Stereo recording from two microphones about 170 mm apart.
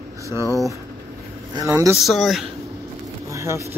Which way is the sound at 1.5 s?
15° right (ahead or behind).